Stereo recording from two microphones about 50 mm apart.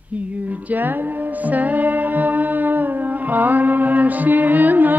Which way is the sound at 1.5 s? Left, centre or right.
Right.